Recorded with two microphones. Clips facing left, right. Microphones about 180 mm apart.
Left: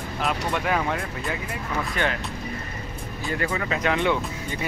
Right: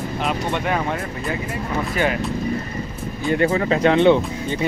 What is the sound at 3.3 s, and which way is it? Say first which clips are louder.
Speech: right 9 dB; 30° right (ahead or behind).